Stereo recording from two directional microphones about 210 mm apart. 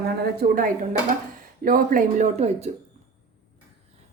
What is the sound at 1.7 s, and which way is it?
A woman's voice, 40° right (ahead or behind).